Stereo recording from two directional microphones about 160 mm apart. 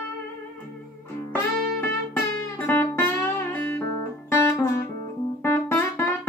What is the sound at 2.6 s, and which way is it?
Music, 10° left (ahead or behind).